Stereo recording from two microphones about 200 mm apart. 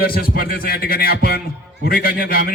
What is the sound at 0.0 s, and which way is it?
A man's voice, 50° left (ahead or behind).